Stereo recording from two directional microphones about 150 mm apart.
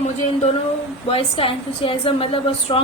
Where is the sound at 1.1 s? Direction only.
40° left (ahead or behind).